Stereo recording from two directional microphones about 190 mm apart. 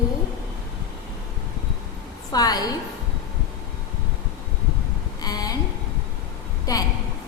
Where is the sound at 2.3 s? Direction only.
20° left (ahead or behind).